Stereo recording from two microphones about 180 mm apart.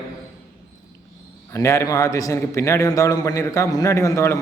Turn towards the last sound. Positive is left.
turn(degrees=15)  # may be behind; listen again after turning